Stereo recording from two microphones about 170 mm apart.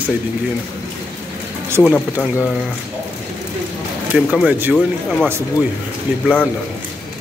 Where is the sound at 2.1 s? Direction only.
10° right (ahead or behind).